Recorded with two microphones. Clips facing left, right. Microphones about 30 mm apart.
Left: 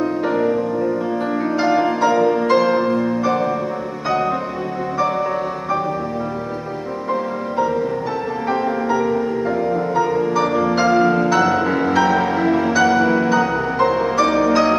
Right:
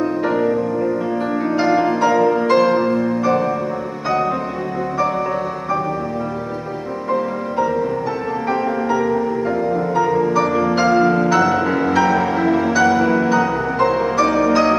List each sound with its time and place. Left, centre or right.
1.6 s music: centre
7.1 s music: centre